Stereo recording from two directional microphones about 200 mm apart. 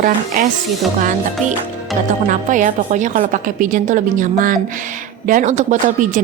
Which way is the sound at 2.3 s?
40° right (ahead or behind).